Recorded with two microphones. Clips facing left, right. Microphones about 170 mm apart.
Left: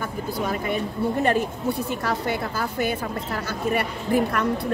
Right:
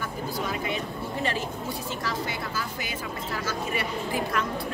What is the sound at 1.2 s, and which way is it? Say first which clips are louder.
A woman's voice: left 6 dB; 55° left (ahead or behind).